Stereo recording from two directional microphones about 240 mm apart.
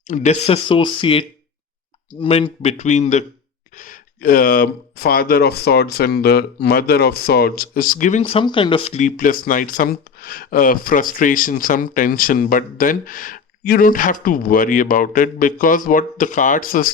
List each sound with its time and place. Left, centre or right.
0.1 s speech: left
2.2 s speech: left